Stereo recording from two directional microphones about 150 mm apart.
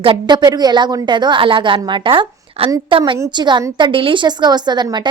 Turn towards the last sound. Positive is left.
turn(degrees=-30)  # may be behind; listen again after turning